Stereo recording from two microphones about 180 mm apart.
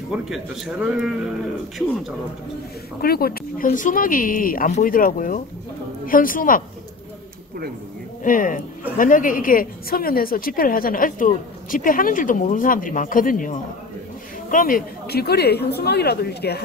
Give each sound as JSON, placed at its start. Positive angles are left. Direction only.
{"t": 0.2, "sound": "a man's voice", "side_deg": -5}
{"t": 3.0, "sound": "a woman's voice", "side_deg": 55}
{"t": 8.2, "sound": "a woman's voice", "side_deg": 50}